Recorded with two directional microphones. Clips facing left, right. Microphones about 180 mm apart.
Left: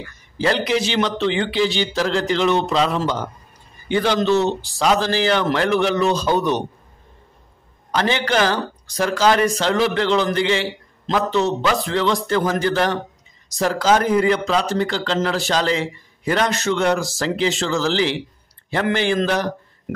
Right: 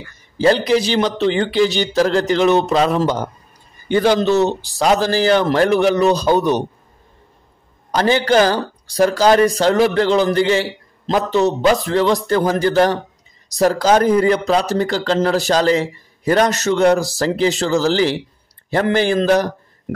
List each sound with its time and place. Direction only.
0.4 s speech: 35° right (ahead or behind)
7.9 s speech: 40° right (ahead or behind)